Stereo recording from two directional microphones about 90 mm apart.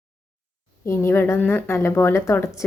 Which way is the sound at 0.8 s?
30° left (ahead or behind).